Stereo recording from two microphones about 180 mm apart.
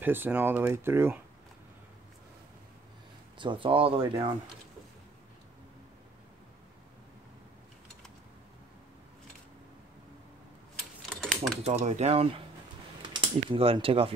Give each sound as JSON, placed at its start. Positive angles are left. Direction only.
{"t": 0.0, "sound": "speech", "side_deg": -10}
{"t": 3.3, "sound": "speech", "side_deg": -25}
{"t": 11.1, "sound": "typing", "side_deg": -5}
{"t": 11.6, "sound": "speech", "side_deg": -35}
{"t": 13.0, "sound": "speech", "side_deg": -25}